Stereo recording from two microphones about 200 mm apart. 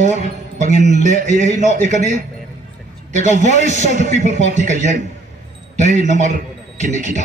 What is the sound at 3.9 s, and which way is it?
A man's voice, 35° right (ahead or behind).